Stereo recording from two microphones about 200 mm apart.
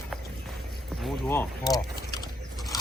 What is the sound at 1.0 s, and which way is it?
Music, centre (ahead or behind).